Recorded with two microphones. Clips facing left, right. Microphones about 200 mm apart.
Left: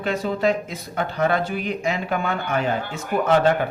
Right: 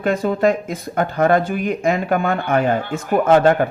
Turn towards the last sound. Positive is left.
turn(degrees=-50)  # may be behind; listen again after turning